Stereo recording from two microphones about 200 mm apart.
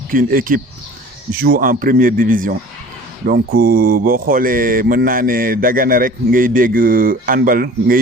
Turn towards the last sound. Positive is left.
turn(degrees=-45)  # may be behind; listen again after turning